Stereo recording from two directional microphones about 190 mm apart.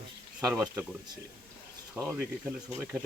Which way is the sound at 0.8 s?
20° right (ahead or behind).